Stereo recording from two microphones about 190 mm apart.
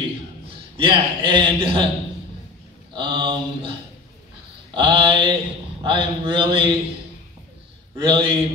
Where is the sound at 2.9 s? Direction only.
25° right (ahead or behind).